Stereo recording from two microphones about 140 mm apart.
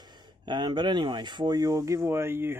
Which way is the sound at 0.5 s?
35° right (ahead or behind).